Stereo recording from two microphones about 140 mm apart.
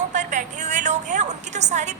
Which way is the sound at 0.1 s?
60° right (ahead or behind).